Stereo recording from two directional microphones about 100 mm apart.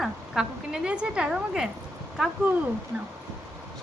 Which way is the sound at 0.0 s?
5° right (ahead or behind).